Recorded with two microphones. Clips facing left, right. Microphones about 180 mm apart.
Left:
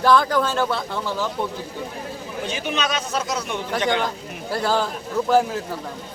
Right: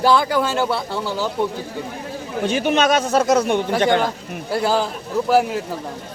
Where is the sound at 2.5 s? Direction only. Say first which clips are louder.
Right 9 dB; 50° right (ahead or behind).